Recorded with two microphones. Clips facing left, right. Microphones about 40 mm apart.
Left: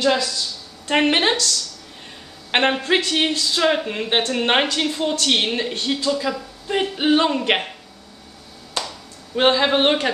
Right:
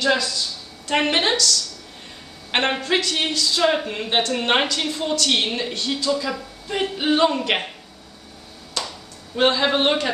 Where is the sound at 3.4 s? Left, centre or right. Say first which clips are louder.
Left 1 dB; centre.